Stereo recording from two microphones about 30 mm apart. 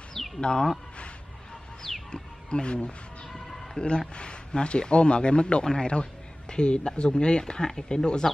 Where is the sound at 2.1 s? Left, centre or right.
Left.